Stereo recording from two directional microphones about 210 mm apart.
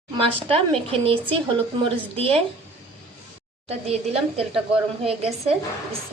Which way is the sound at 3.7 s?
30° right (ahead or behind).